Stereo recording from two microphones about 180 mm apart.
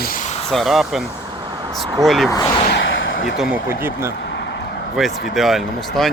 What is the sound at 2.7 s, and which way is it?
Artillery fire, 90° left.